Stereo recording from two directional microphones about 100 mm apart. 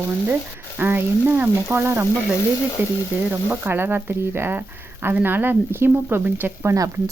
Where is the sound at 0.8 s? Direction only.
20° right (ahead or behind).